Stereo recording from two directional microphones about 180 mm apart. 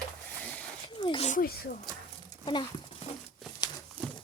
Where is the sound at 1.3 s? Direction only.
55° left (ahead or behind).